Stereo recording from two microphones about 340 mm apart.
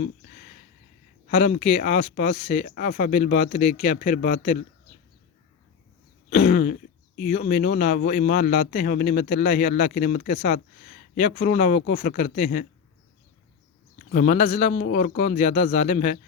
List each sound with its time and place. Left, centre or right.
1.3 s a man's voice: centre
6.4 s throat clearing: left
7.2 s a man's voice: left
14.1 s a man's voice: left